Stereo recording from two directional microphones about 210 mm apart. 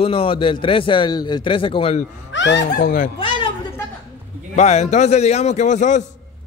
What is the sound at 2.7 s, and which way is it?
Speech, 40° left (ahead or behind).